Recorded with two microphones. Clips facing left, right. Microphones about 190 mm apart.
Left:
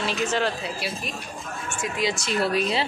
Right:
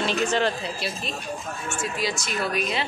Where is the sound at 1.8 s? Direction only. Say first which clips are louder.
Left 3 dB; 25° left (ahead or behind).